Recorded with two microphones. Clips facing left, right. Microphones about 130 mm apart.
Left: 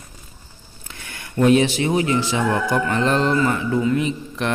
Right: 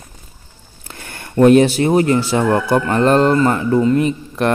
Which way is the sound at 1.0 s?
45° right (ahead or behind).